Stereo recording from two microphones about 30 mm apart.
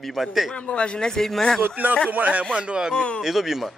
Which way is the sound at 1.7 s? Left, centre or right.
Right.